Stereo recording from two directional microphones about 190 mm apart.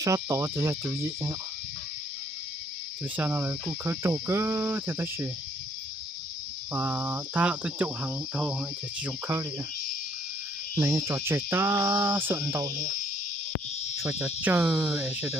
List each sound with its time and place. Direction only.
0.0 s cricket: 15° right (ahead or behind)
3.2 s cricket: 10° right (ahead or behind)
6.7 s cricket: 10° right (ahead or behind)
10.8 s cricket: 15° right (ahead or behind)
14.0 s cricket: 15° right (ahead or behind)